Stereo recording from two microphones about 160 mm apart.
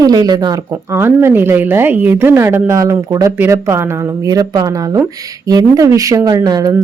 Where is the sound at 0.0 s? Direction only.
25° right (ahead or behind).